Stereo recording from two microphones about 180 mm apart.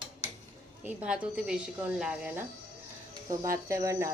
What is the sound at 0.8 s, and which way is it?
A woman's voice, 10° right (ahead or behind).